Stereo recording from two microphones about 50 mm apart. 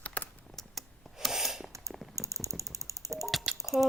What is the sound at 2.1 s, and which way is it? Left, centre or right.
Mechanisms, right.